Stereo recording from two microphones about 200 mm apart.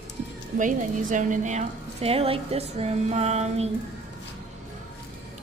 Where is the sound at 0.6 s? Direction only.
40° right (ahead or behind).